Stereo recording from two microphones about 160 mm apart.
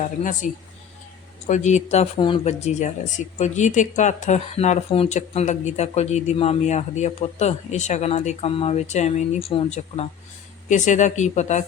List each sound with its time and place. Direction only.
1.5 s speech: 50° left (ahead or behind)
2.1 s speech: 30° left (ahead or behind)
2.4 s speech: 45° left (ahead or behind)